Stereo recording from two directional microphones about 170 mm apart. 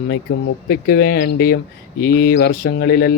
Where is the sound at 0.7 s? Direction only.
65° left (ahead or behind).